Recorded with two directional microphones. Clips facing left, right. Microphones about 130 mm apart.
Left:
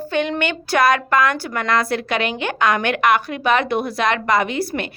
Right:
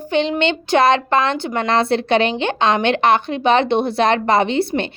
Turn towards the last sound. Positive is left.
turn(degrees=-30)  # may be behind; listen again after turning